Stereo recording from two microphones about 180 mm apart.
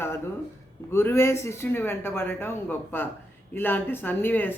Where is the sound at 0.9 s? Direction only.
15° left (ahead or behind).